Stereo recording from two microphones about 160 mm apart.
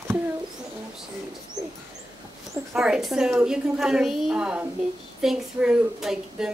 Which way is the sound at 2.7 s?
5° right (ahead or behind).